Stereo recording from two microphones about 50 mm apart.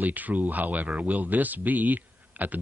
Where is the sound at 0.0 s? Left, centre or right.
Right.